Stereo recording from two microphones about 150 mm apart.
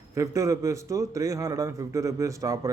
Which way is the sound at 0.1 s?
20° right (ahead or behind).